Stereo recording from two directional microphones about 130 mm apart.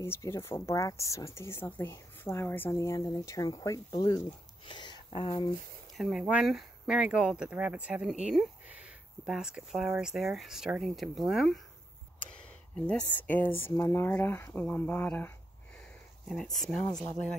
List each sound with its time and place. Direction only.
0.0 s speech: 20° left (ahead or behind); by 5.4 s 45° left (ahead or behind)
5.9 s speech: 5° right (ahead or behind)
12.7 s speech: 10° left (ahead or behind)
15.8 s a sound: 5° left (ahead or behind)
16.9 s speech: 5° left (ahead or behind)